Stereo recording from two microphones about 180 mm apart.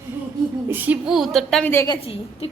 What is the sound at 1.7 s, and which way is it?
Speech, 15° left (ahead or behind).